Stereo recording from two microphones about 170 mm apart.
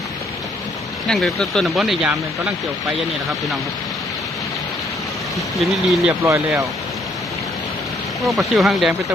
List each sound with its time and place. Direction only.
1.0 s speech: centre (ahead or behind)
5.5 s speech: centre (ahead or behind)
6.2 s speech: 15° right (ahead or behind)
8.2 s speech: centre (ahead or behind)